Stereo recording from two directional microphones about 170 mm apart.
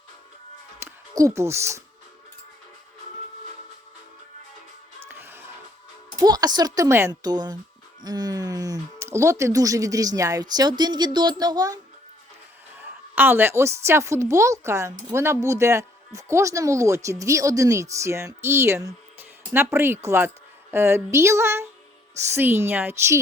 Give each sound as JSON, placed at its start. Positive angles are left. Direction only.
{"t": 0.8, "sound": "speech", "side_deg": -15}
{"t": 5.0, "sound": "music", "side_deg": -15}
{"t": 6.1, "sound": "speech", "side_deg": -20}
{"t": 12.8, "sound": "a woman's voice", "side_deg": -10}